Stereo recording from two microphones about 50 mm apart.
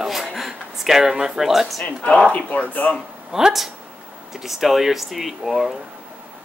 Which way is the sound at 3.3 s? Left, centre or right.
Centre.